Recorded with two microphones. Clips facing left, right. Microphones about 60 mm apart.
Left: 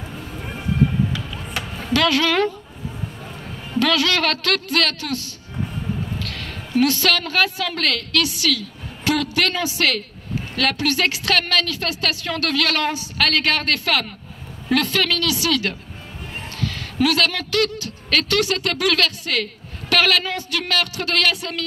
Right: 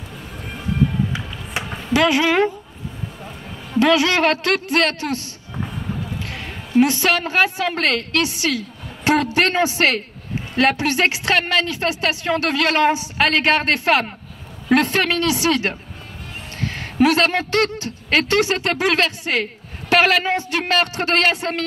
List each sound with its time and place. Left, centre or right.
1.6 s a sound: right
1.9 s a man's voice: centre
3.8 s a man's voice: right